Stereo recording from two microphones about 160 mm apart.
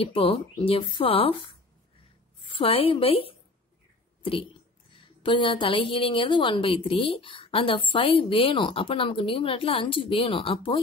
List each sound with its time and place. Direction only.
0.0 s a woman's voice: 35° left (ahead or behind)